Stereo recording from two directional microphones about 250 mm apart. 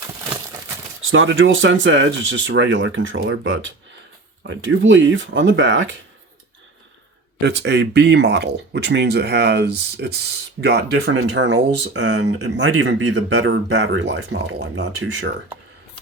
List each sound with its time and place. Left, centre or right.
1.1 s speech: right
7.4 s speech: right